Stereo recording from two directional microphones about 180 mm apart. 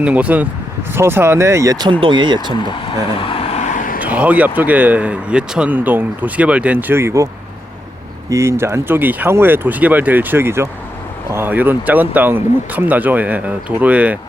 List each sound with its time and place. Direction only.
0.0 s speech: 10° right (ahead or behind); by 2.5 s 25° right (ahead or behind)
2.5 s vehicle: 25° left (ahead or behind); by 4.0 s 50° left (ahead or behind)
4.0 s speech: 10° right (ahead or behind)
8.3 s speech: 15° right (ahead or behind)